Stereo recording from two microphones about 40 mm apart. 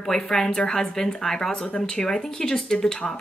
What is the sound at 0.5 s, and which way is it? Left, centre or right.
A woman's voice, left.